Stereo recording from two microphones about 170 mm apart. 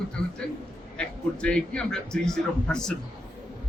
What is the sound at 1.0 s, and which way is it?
A man's voice, 5° left (ahead or behind).